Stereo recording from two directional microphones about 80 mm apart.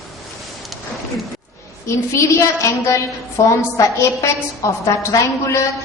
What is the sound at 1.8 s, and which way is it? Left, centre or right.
A woman's voice, left.